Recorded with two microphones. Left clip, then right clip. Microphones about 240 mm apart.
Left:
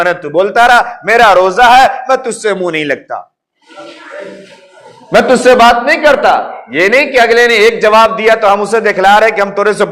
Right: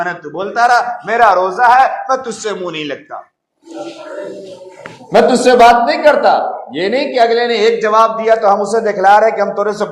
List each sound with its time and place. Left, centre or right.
0.0 s a man's voice: left
1.5 s a man's voice: left
5.3 s a man's voice: left